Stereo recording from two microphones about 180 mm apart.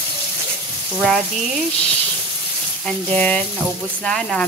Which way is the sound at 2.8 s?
5° left (ahead or behind).